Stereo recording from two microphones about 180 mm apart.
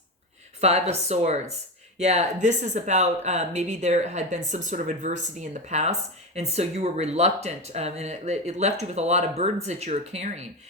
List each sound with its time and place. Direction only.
0.6 s speech: 35° right (ahead or behind)